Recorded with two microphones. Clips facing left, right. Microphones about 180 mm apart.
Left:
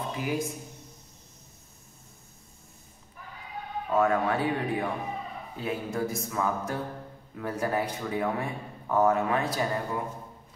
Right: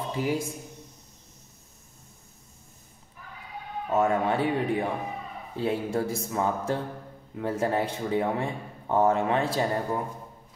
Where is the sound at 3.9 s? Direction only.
25° right (ahead or behind).